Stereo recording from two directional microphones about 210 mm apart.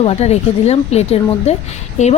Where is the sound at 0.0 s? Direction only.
30° left (ahead or behind).